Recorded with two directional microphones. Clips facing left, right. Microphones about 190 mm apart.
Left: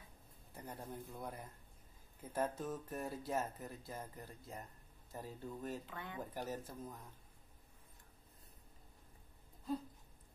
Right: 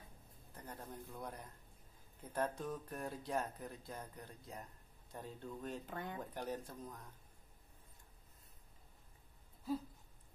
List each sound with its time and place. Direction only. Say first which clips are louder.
0.6 s speech: left 2 dB; 10° left (ahead or behind)
5.9 s speech: right 4 dB; 45° right (ahead or behind)
6.3 s speech: even; 5° left (ahead or behind)